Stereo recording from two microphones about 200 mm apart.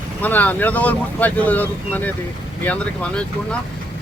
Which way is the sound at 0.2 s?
10° left (ahead or behind).